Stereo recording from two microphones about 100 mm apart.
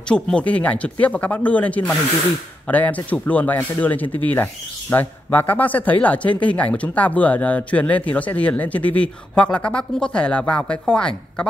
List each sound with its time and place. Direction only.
0.1 s speech: 10° left (ahead or behind)